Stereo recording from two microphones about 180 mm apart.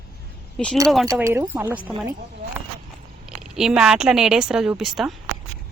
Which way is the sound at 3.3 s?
Centre (ahead or behind).